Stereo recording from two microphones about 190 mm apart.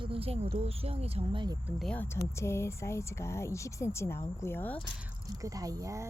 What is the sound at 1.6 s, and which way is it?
Speech, 5° left (ahead or behind).